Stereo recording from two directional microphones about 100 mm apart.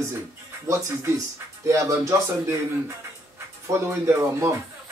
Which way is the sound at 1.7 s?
30° right (ahead or behind).